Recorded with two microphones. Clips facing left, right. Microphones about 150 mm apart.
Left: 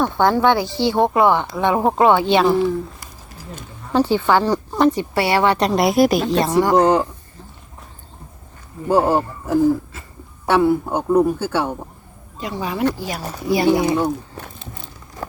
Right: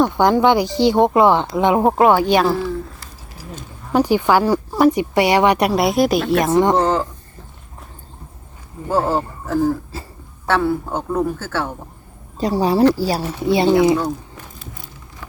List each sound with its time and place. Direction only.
0.0 s a woman's voice: 15° right (ahead or behind)
2.1 s a man's voice: 25° left (ahead or behind)
3.9 s a woman's voice: 15° right (ahead or behind)
6.6 s speech: 25° right (ahead or behind)
6.8 s a man's voice: 15° left (ahead or behind)
8.9 s a man's voice: 15° left (ahead or behind)
9.9 s speech: 30° right (ahead or behind)
10.4 s a man's voice: 15° left (ahead or behind)
12.4 s speech: 35° right (ahead or behind)
13.9 s a sound: 30° left (ahead or behind)
15.2 s a sound: 40° left (ahead or behind)